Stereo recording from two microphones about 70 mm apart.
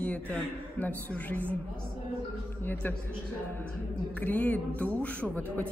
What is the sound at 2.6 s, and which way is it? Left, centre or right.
Speech, left.